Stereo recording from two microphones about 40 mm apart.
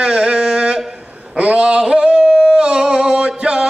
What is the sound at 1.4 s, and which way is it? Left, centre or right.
Singing, right.